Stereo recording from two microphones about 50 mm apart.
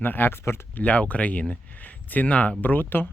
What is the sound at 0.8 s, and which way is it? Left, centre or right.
Speech, left.